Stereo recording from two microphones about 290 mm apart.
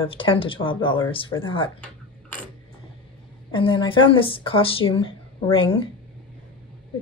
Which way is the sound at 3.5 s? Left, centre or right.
Centre.